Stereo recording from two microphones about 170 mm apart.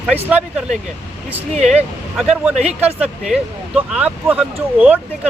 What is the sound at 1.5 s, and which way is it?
Speech, 40° right (ahead or behind).